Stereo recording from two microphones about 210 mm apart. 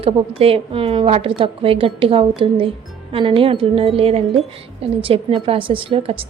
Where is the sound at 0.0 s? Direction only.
25° right (ahead or behind).